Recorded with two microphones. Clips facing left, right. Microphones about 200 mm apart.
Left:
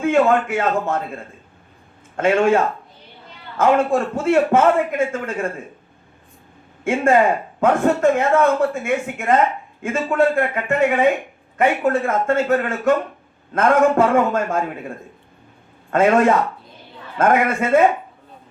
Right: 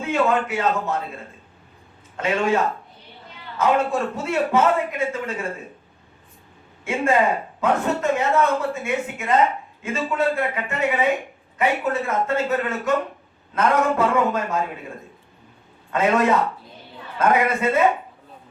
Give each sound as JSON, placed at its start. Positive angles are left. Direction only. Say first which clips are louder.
{"t": 0.0, "sound": "a man's voice", "louder": "left 5 dB", "side_deg": 50}
{"t": 2.1, "sound": "a man's voice", "louder": "left 6 dB", "side_deg": 50}
{"t": 3.6, "sound": "a man's voice", "louder": "left 4 dB", "side_deg": 50}
{"t": 6.8, "sound": "a man's voice", "louder": "left 4 dB", "side_deg": 50}
{"t": 15.9, "sound": "a man's voice", "louder": "left 4 dB", "side_deg": 50}